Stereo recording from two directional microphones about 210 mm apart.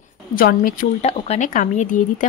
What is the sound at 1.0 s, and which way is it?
A woman's voice, 30° left (ahead or behind).